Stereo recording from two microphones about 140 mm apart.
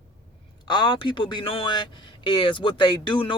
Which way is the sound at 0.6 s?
35° left (ahead or behind).